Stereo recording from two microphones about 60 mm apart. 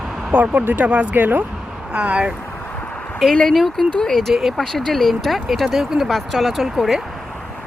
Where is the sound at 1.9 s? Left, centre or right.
Centre.